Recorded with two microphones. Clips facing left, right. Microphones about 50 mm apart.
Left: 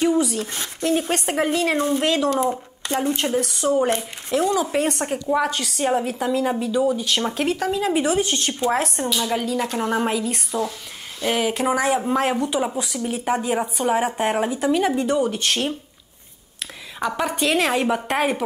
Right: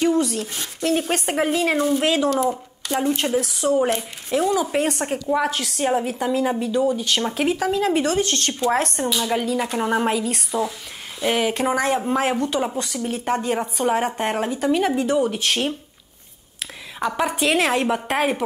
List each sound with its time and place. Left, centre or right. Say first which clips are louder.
0.0 s speech: even; centre
0.5 s speech: left 1 dB; left
1.1 s a woman's voice: even; centre
2.2 s speech: even; centre
2.9 s a woman's voice: right 1 dB; centre
8.0 s speech: even; centre
8.7 s a woman's voice: right 1 dB; centre
17.0 s a woman's voice: right 1 dB; centre